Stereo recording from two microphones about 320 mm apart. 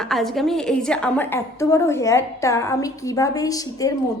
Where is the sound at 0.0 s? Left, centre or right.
Centre.